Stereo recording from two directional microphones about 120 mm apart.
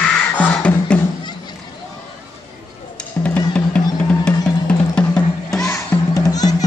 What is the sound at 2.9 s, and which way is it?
Drum, 10° left (ahead or behind).